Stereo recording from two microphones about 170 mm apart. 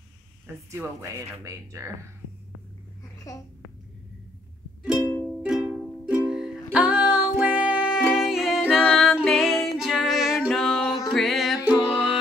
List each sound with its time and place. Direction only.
0.8 s speech: 15° right (ahead or behind)
4.9 s music: 15° left (ahead or behind)
5.4 s music: 5° right (ahead or behind)